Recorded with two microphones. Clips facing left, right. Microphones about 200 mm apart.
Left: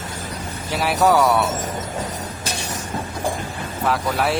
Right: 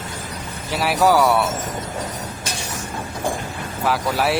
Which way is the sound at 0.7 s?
Centre (ahead or behind).